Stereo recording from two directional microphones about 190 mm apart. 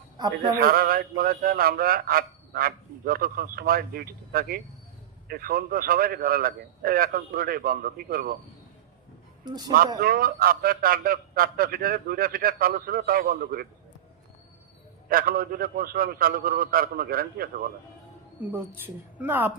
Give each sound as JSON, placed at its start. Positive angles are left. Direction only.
{"t": 0.5, "sound": "a man's voice", "side_deg": -50}
{"t": 9.4, "sound": "speech", "side_deg": -20}
{"t": 10.0, "sound": "a man's voice", "side_deg": -50}
{"t": 15.1, "sound": "a man's voice", "side_deg": -50}
{"t": 19.2, "sound": "a woman's voice", "side_deg": -10}